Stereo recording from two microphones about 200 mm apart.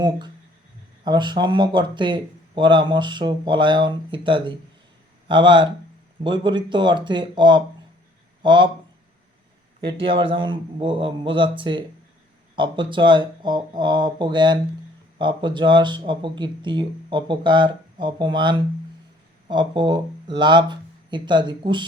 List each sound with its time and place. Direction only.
1.0 s speech: 20° right (ahead or behind)
10.0 s speech: 25° right (ahead or behind)